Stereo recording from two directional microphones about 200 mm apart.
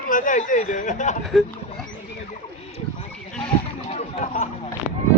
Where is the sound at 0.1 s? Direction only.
40° left (ahead or behind).